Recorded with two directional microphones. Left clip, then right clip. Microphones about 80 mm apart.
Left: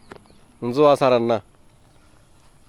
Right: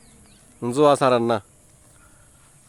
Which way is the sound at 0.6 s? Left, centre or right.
Right.